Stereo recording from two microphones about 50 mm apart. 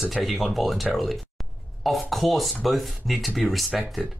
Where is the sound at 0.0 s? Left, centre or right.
Centre.